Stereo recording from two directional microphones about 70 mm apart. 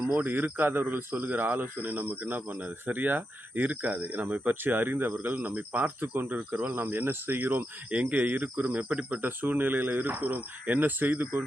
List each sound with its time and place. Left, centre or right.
0.1 s speech: right